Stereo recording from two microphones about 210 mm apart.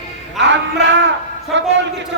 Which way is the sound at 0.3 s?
60° right (ahead or behind).